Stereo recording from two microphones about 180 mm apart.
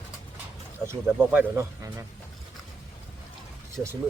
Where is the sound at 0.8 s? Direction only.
15° right (ahead or behind).